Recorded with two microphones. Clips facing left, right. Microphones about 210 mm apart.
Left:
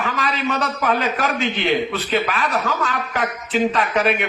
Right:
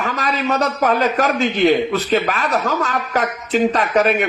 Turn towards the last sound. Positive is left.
turn(degrees=-40)  # may be behind; listen again after turning